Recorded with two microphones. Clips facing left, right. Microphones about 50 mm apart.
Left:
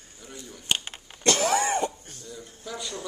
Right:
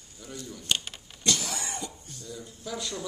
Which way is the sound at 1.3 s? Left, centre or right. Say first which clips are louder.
Left 9 dB; left.